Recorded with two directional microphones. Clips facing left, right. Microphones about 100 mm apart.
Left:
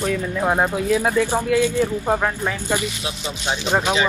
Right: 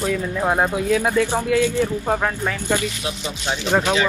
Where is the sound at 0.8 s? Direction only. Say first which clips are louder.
Even; 20° left (ahead or behind).